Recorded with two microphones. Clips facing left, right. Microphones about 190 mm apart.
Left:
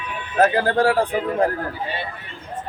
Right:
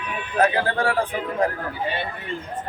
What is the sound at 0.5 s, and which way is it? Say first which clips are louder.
Speech: left 5 dB; 40° left (ahead or behind).